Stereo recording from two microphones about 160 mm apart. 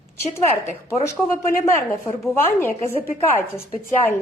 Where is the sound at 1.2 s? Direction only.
15° left (ahead or behind).